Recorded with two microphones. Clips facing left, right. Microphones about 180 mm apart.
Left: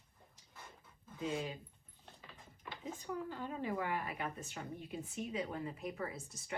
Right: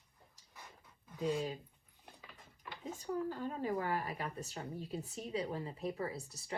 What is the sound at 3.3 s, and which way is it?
Speech, 40° right (ahead or behind).